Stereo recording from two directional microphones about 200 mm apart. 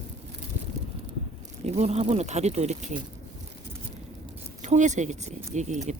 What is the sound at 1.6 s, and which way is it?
Speech, 30° right (ahead or behind).